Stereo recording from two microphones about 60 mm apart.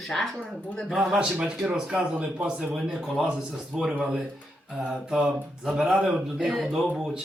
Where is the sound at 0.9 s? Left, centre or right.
Centre.